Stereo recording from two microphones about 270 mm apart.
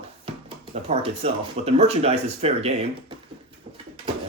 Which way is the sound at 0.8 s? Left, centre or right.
Right.